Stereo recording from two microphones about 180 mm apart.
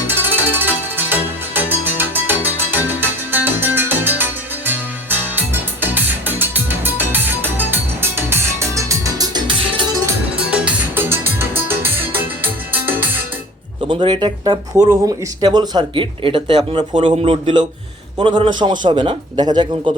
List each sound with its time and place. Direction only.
0.1 s music: 10° right (ahead or behind)
10.3 s music: 5° right (ahead or behind)
13.8 s speech: 25° right (ahead or behind)